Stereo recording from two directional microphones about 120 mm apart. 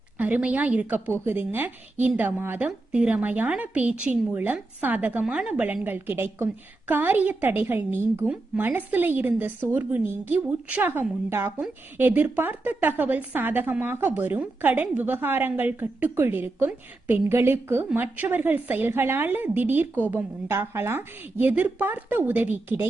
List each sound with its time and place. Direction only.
0.2 s a woman's voice: 10° right (ahead or behind)